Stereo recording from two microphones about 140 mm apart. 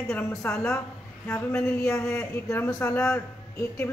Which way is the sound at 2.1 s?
20° left (ahead or behind).